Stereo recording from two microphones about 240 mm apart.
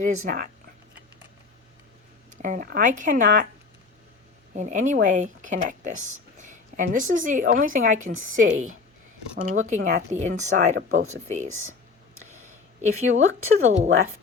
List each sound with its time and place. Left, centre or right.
0.0 s speech: right
2.3 s speech: right
4.5 s speech: right
12.8 s speech: right